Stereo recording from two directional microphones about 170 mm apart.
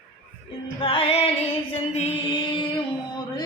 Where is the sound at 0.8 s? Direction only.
30° left (ahead or behind).